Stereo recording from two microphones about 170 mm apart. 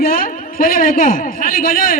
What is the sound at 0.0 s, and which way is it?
A man's voice, 55° left (ahead or behind).